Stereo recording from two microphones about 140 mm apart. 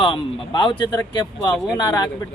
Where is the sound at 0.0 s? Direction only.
35° left (ahead or behind).